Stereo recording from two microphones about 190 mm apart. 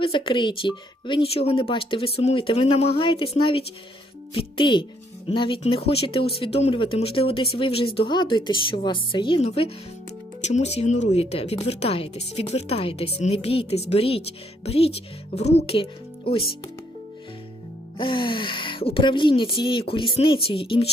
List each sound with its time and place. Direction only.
0.0 s speech: 30° left (ahead or behind)
17.9 s speech: 25° left (ahead or behind)